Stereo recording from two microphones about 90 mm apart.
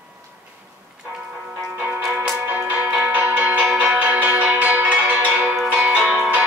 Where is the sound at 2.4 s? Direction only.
20° right (ahead or behind).